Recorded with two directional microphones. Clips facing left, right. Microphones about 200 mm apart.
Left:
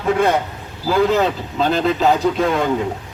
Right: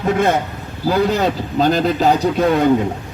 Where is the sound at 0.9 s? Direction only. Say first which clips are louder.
Even; 40° right (ahead or behind).